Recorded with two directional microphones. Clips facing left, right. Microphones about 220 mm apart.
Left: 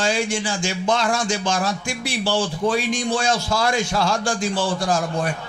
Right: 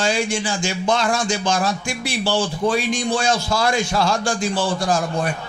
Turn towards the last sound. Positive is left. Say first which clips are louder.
# right 1 dB
turn(degrees=-10)  # may be behind; listen again after turning